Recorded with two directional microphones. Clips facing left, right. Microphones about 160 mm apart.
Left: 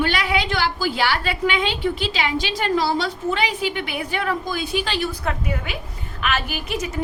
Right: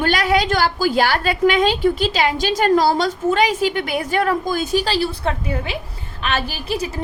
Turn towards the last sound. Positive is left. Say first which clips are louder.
# right 2 dB
turn(degrees=-30)  # may be behind; listen again after turning